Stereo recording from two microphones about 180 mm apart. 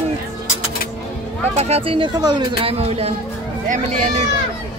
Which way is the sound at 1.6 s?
35° right (ahead or behind).